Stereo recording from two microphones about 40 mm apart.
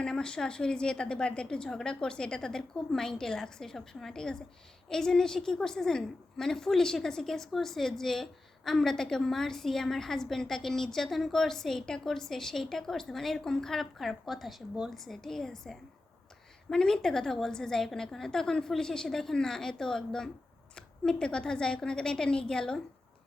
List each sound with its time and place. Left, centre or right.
0.0 s a woman's voice: centre